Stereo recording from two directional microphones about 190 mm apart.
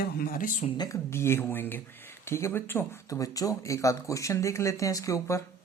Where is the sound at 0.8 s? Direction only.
15° left (ahead or behind).